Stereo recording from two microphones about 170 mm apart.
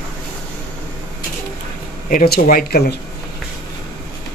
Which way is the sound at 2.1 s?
60° left (ahead or behind).